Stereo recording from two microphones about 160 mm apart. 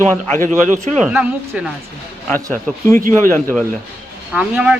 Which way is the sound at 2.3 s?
15° left (ahead or behind).